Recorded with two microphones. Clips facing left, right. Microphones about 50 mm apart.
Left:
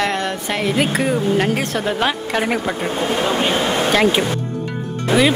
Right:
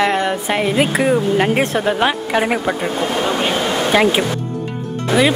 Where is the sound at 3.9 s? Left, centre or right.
Centre.